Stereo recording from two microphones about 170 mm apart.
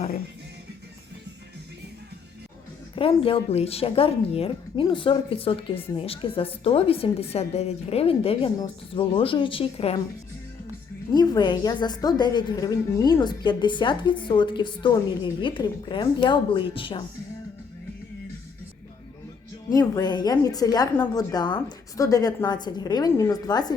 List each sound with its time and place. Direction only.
2.9 s a woman's voice: 30° left (ahead or behind)
11.1 s a woman's voice: 25° left (ahead or behind)
19.7 s a woman's voice: 20° left (ahead or behind)